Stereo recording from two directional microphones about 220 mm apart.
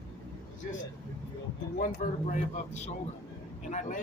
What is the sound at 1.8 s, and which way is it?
Speech, 35° left (ahead or behind).